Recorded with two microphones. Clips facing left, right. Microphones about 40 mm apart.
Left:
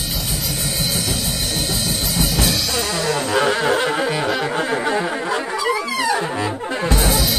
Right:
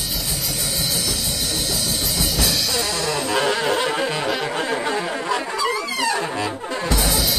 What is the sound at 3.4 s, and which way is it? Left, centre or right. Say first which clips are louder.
Music: left 3 dB; centre.